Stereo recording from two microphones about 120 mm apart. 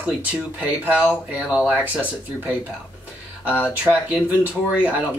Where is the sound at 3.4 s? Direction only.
20° left (ahead or behind).